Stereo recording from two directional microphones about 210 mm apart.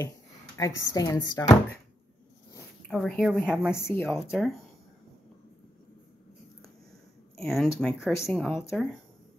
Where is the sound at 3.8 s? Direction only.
10° left (ahead or behind).